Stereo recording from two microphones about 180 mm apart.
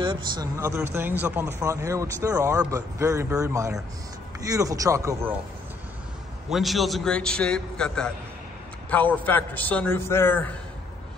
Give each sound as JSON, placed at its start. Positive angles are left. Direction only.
{"t": 0.0, "sound": "a sound", "side_deg": -25}
{"t": 0.6, "sound": "speech", "side_deg": -15}
{"t": 6.5, "sound": "a man's voice", "side_deg": 0}